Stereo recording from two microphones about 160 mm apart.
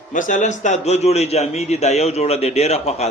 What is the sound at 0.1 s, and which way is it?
Speech, 55° left (ahead or behind).